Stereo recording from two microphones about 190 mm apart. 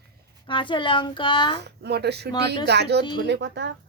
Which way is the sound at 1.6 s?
60° right (ahead or behind).